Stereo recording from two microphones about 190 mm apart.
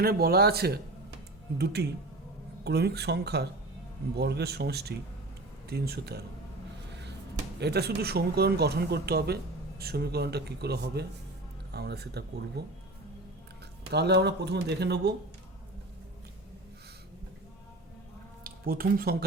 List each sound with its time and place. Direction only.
0.0 s speech: 55° right (ahead or behind)
7.6 s speech: 60° right (ahead or behind)
13.9 s speech: 60° right (ahead or behind)
18.4 s speech: 50° right (ahead or behind)